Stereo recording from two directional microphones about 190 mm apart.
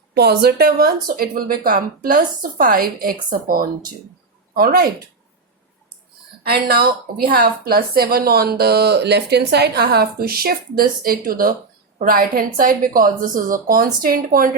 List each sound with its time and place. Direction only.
0.1 s a woman's voice: 60° right (ahead or behind)
6.4 s a woman's voice: 55° right (ahead or behind)